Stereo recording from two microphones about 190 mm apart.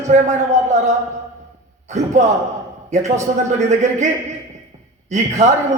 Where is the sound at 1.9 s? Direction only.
40° right (ahead or behind).